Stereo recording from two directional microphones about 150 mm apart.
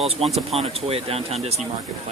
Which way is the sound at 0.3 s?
Centre (ahead or behind).